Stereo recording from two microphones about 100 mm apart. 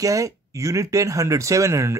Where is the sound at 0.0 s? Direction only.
35° right (ahead or behind).